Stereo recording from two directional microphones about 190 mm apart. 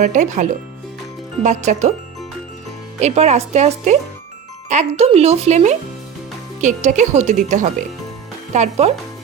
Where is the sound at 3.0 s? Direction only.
35° right (ahead or behind).